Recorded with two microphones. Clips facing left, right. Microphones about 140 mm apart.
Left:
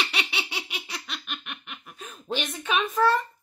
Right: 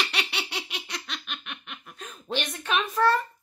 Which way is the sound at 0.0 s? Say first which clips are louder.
Even; centre (ahead or behind).